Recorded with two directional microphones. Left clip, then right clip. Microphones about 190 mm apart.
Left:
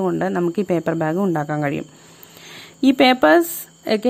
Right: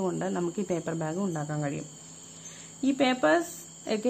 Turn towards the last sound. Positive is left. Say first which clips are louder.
# left 10 dB
turn(degrees=30)  # may be behind; listen again after turning